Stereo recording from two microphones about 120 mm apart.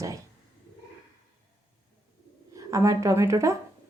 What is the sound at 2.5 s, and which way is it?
Speech, 25° right (ahead or behind).